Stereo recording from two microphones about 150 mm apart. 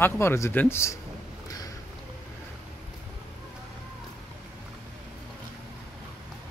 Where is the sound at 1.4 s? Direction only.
25° left (ahead or behind).